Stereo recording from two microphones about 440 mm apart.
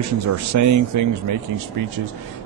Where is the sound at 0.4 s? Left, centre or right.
Right.